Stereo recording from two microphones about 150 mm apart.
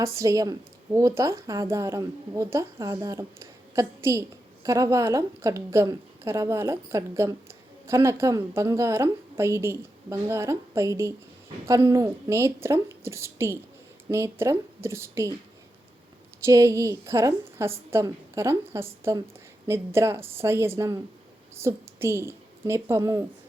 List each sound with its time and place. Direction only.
0.0 s a woman's voice: 20° right (ahead or behind)
16.4 s a woman's voice: 20° right (ahead or behind)